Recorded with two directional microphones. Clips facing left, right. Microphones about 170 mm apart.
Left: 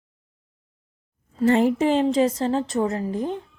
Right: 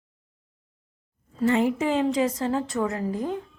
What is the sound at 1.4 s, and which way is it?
A woman's voice, 35° left (ahead or behind).